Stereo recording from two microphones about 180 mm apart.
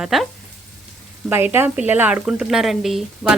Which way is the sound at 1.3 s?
10° right (ahead or behind).